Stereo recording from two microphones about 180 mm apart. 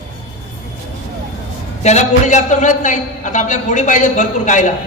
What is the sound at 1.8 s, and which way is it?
A man's voice, 40° left (ahead or behind).